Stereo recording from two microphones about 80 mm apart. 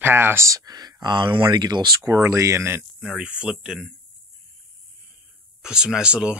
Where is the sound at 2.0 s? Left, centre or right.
Right.